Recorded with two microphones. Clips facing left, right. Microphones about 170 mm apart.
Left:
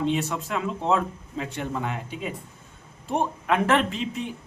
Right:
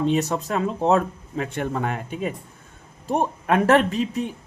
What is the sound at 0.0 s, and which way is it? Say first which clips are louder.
Speech: right 4 dB; 40° right (ahead or behind).